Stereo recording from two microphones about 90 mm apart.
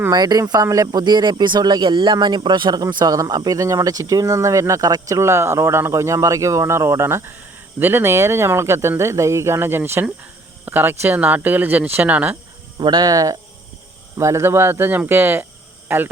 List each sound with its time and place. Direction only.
0.1 s speech: 50° right (ahead or behind); by 12.4 s 20° right (ahead or behind)
12.8 s speech: 50° right (ahead or behind)
14.2 s speech: 30° right (ahead or behind)